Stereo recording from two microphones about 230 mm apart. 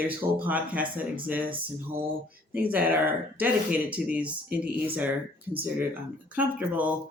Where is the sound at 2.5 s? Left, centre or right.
Centre.